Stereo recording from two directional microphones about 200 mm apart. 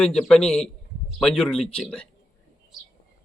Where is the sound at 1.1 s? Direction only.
Centre (ahead or behind).